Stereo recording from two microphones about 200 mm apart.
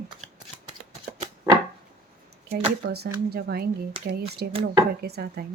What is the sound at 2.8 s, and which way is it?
Speech, 50° right (ahead or behind).